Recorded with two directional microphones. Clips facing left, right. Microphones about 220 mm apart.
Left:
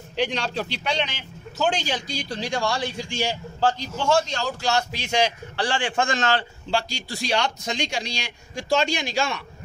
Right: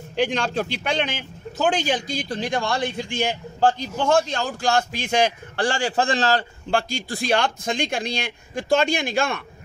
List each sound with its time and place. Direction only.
0.1 s a man's voice: 50° right (ahead or behind); by 6.4 s 35° right (ahead or behind)
6.7 s speech: 50° right (ahead or behind)